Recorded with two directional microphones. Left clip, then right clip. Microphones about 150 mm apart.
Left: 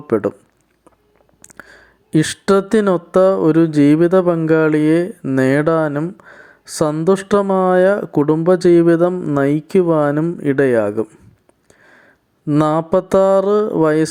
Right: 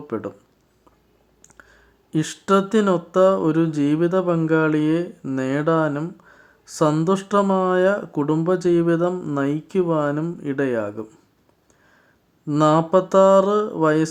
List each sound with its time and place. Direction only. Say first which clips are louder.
0.1 s mantra: left 12 dB; 40° left (ahead or behind)
1.5 s speech: left 11 dB; 40° left (ahead or behind)
4.4 s mantra: left 6 dB; 40° left (ahead or behind)
6.1 s a sound: left 9 dB; 40° left (ahead or behind)
7.0 s mantra: left 5 dB; 40° left (ahead or behind)
11.7 s a sound: left 10 dB; 35° left (ahead or behind)
12.5 s mantra: left 1 dB; 40° left (ahead or behind)